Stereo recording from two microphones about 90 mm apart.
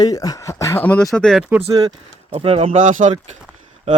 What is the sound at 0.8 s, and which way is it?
Speech, 15° left (ahead or behind).